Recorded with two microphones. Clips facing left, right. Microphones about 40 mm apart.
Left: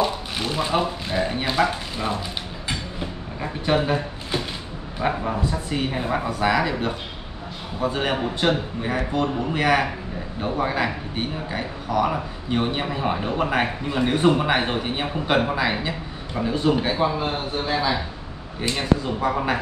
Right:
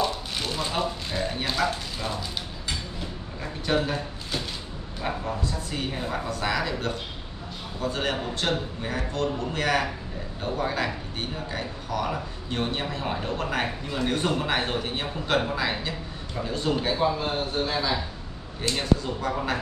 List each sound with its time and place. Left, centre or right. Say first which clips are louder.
0.0 s speech: left 4 dB; centre
3.6 s speech: left 4 dB; left